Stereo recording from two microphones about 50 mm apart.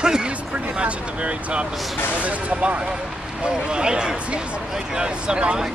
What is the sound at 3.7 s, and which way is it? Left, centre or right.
Speech, centre.